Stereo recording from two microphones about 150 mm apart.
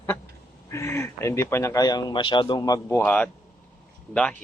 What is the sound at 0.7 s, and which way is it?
Speech, 20° left (ahead or behind).